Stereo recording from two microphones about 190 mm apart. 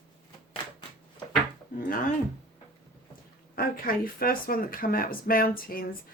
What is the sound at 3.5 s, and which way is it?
Speech, 50° left (ahead or behind).